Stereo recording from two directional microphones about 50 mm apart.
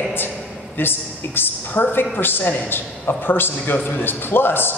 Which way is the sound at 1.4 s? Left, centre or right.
Left.